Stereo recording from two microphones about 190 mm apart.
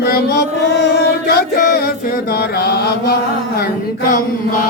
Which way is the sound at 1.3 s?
55° left (ahead or behind).